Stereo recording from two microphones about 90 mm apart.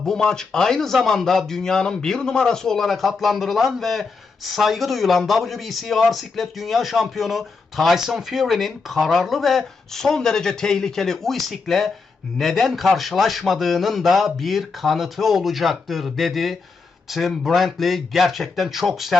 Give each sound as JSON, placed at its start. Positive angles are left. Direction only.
{"t": 0.0, "sound": "a man's voice", "side_deg": 5}